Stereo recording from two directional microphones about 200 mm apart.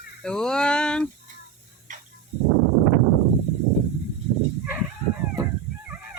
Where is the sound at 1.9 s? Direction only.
40° right (ahead or behind).